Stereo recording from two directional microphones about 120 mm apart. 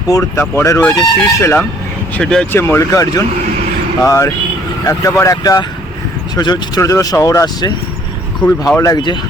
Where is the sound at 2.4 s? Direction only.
20° left (ahead or behind); by 9.2 s 35° left (ahead or behind).